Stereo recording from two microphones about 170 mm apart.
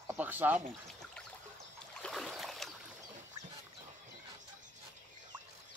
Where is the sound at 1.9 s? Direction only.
Centre (ahead or behind).